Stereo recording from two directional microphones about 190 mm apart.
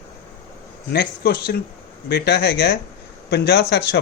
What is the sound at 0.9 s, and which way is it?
A man's voice, 60° left (ahead or behind).